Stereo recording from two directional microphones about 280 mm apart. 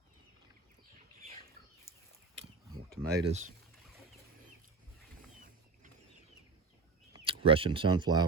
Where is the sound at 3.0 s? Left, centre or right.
Right.